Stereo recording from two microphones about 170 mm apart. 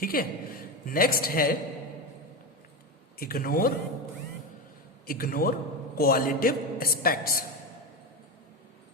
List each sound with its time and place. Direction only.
0.0 s a man's voice: 60° left (ahead or behind)
3.2 s a man's voice: 60° left (ahead or behind)
5.0 s a man's voice: 60° left (ahead or behind)